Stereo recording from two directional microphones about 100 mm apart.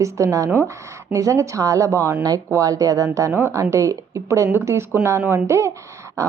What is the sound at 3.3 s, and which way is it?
Speech, 25° right (ahead or behind).